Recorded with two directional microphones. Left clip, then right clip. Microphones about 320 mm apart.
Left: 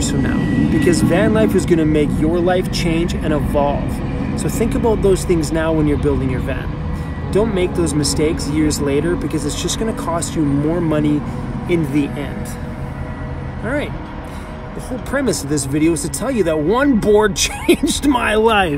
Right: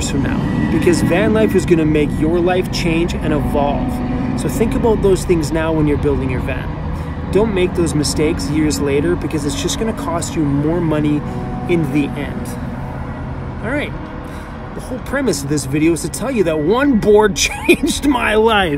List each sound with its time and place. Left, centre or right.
0.0 s a sound: centre
0.4 s music: right
0.7 s speech: centre
15.1 s speech: centre